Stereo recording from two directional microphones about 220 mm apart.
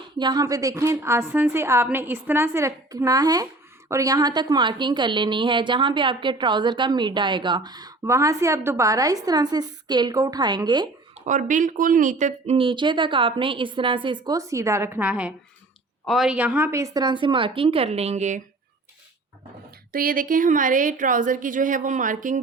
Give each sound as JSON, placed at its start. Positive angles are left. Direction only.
{"t": 0.2, "sound": "a woman's voice", "side_deg": -20}
{"t": 11.3, "sound": "a woman's voice", "side_deg": -35}
{"t": 19.9, "sound": "a woman's voice", "side_deg": -40}